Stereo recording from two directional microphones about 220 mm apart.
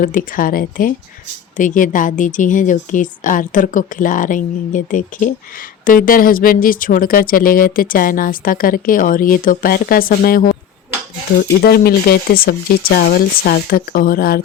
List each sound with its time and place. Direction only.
0.0 s speech: 40° left (ahead or behind)
11.6 s speech: 45° left (ahead or behind)